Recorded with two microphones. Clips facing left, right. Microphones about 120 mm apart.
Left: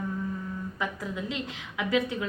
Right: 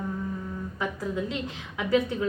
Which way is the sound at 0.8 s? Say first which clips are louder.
Right 4 dB; 40° right (ahead or behind).